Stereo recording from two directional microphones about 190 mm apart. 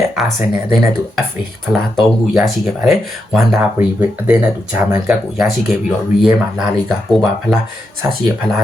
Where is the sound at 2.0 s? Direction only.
Centre (ahead or behind).